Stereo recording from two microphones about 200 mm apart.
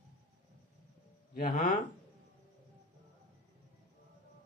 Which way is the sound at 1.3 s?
40° left (ahead or behind).